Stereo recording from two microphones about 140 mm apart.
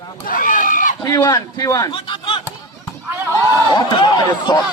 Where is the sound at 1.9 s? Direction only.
40° left (ahead or behind).